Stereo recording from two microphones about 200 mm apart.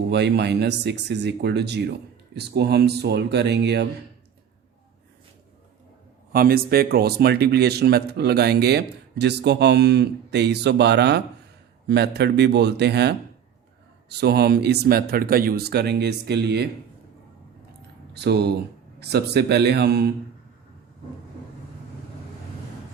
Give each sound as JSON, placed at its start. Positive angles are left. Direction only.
{"t": 0.1, "sound": "speech", "side_deg": -55}
{"t": 6.3, "sound": "a man's voice", "side_deg": -45}
{"t": 18.1, "sound": "speech", "side_deg": -55}